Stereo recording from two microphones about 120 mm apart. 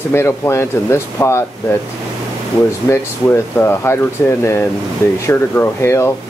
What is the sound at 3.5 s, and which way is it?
Speech, 20° left (ahead or behind).